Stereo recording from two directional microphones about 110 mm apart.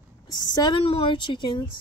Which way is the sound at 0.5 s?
40° left (ahead or behind).